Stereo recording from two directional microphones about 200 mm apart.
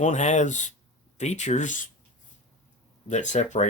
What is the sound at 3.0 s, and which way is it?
Speech, 35° left (ahead or behind).